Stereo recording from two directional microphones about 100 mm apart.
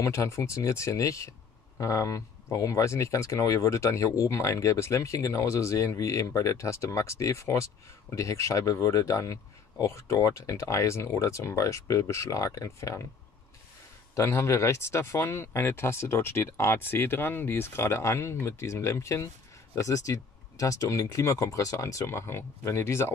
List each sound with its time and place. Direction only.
0.0 s speech: 30° left (ahead or behind)
14.1 s speech: 30° left (ahead or behind)